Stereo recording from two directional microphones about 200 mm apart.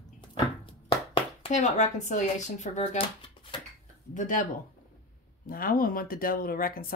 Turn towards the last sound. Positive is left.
turn(degrees=45)  # may be behind; listen again after turning